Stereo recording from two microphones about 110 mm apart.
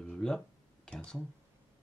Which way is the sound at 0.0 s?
5° left (ahead or behind).